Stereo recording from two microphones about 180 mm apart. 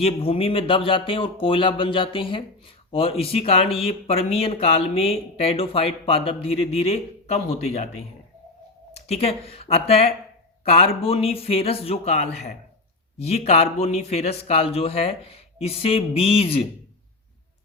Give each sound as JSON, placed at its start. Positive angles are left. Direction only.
{"t": 0.0, "sound": "speech", "side_deg": 30}
{"t": 8.9, "sound": "speech", "side_deg": 35}